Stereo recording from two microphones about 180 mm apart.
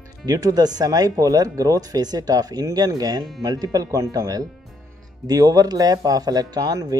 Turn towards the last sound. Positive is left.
turn(degrees=-20)  # may be behind; listen again after turning